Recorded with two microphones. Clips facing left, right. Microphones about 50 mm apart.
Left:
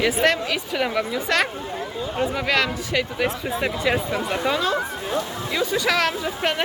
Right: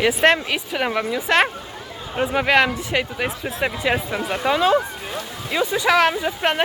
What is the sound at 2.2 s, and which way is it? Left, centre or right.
Speech, right.